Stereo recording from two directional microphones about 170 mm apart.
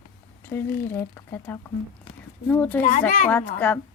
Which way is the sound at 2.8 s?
55° left (ahead or behind).